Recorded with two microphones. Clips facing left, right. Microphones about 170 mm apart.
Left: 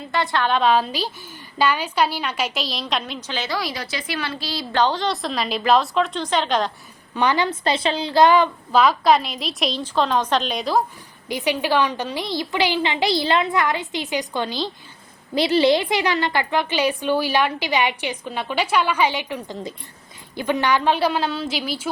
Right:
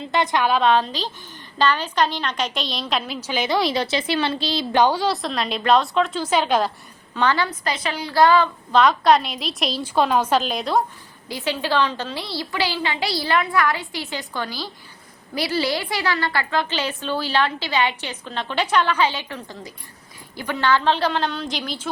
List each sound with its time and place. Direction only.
0.1 s a woman's voice: 20° right (ahead or behind)
0.5 s a woman's voice: centre (ahead or behind); by 4.8 s 25° right (ahead or behind)
4.8 s a woman's voice: 10° right (ahead or behind)
7.2 s a child's voice: 15° left (ahead or behind)
8.7 s a woman's voice: 5° left (ahead or behind)
11.3 s a child's voice: 15° left (ahead or behind)